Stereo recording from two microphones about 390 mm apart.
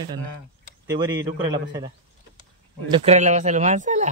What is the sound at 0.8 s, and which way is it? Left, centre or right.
Speech, centre.